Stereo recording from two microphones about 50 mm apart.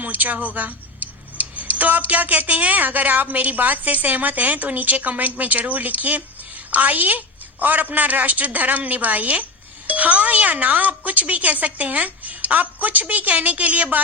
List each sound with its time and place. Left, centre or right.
0.0 s a woman's voice: right